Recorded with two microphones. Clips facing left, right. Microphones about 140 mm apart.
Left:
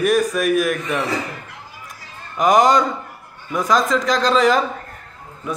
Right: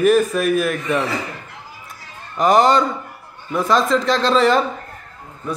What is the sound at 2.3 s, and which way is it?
A man's voice, centre (ahead or behind).